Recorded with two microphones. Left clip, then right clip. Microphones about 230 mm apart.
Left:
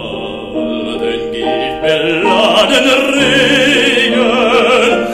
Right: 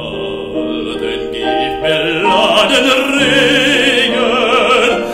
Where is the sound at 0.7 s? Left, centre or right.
Right.